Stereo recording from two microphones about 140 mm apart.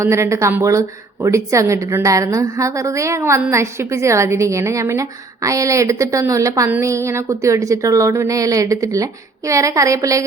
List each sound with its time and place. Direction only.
0.0 s a woman's voice: 20° right (ahead or behind)